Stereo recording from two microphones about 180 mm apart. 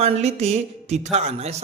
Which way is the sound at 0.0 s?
35° right (ahead or behind).